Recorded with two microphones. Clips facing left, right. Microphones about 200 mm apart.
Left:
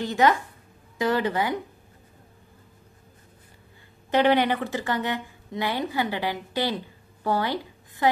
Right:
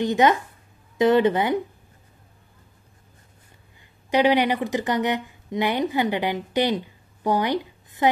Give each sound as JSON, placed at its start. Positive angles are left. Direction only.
{"t": 0.0, "sound": "a woman's voice", "side_deg": -20}
{"t": 4.1, "sound": "a woman's voice", "side_deg": -15}